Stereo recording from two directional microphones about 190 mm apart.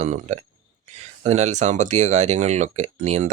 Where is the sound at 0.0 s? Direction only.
35° right (ahead or behind).